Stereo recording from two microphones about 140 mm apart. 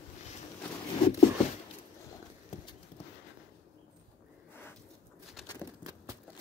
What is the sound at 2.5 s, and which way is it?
Clip-clop, 55° left (ahead or behind).